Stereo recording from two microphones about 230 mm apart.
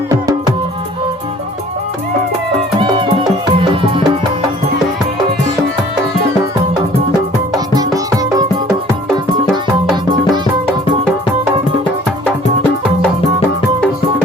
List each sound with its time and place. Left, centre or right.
3.6 s music: right
7.7 s music: centre